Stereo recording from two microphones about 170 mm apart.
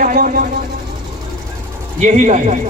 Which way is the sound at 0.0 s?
50° right (ahead or behind).